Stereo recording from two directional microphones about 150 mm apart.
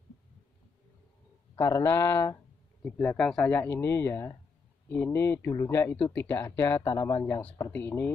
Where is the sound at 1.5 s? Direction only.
20° left (ahead or behind).